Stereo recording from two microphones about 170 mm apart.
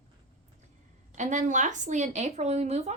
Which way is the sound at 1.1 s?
45° right (ahead or behind).